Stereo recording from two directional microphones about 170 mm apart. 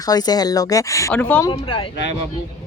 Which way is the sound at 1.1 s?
10° left (ahead or behind).